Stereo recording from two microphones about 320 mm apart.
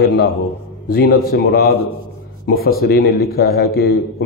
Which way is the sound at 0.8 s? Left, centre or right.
Left.